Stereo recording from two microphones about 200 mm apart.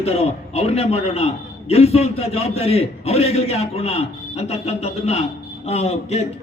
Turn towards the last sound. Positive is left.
turn(degrees=30)  # may be behind; listen again after turning